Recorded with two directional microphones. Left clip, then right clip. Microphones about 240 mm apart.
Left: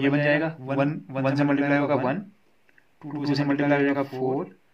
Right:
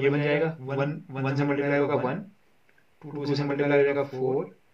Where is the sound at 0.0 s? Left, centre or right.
Left.